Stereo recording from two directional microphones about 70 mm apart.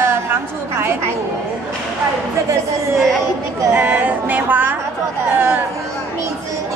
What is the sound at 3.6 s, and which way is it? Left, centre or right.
Speech, right.